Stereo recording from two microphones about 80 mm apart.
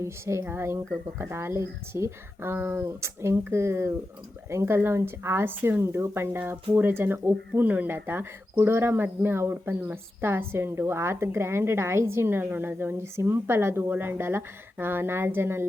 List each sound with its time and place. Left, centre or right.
0.0 s speech: right